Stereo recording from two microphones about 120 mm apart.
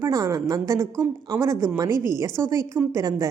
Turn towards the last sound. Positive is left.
turn(degrees=-25)  # may be behind; listen again after turning